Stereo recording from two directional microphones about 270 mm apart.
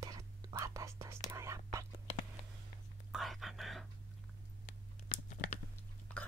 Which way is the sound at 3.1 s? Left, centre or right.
Centre.